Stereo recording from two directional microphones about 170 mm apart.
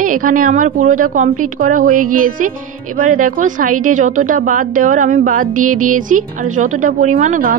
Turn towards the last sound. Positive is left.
turn(degrees=-50)  # may be behind; listen again after turning